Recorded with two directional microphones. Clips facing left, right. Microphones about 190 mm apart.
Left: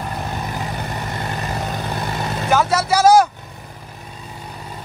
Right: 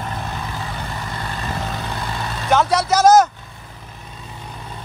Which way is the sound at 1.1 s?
25° left (ahead or behind).